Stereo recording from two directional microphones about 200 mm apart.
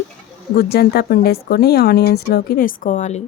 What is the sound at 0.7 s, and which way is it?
Speech, 50° left (ahead or behind).